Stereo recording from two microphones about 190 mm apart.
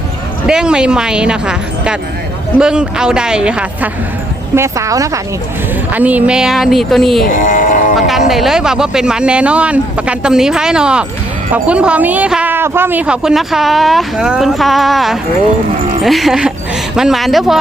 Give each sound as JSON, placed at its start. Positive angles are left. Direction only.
{"t": 0.4, "sound": "a woman's voice", "side_deg": -5}
{"t": 7.3, "sound": "speech", "side_deg": 45}
{"t": 7.9, "sound": "speech", "side_deg": 0}